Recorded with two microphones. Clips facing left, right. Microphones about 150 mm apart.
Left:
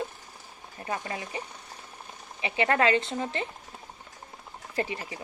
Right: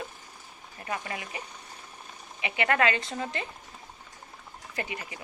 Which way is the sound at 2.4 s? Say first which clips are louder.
Left 1 dB; 30° left (ahead or behind).